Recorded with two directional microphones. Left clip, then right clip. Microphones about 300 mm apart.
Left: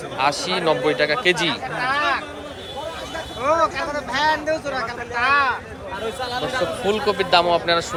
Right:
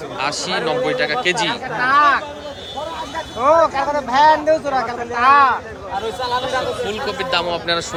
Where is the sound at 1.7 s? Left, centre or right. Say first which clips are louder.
Right 9 dB; right.